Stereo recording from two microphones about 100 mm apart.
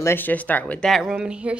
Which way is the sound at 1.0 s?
10° right (ahead or behind).